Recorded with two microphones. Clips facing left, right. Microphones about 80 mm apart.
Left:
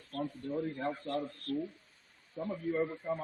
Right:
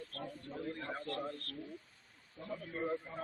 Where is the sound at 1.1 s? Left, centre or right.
Right.